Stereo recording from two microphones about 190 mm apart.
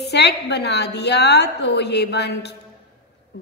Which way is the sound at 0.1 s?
60° left (ahead or behind).